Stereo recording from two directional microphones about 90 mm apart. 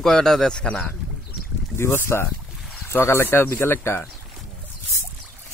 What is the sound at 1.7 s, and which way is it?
Speech, 30° left (ahead or behind).